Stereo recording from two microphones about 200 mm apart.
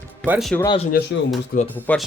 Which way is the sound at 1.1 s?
70° left (ahead or behind).